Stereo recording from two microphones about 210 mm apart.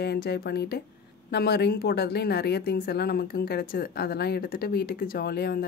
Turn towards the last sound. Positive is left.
turn(degrees=45)  # may be behind; listen again after turning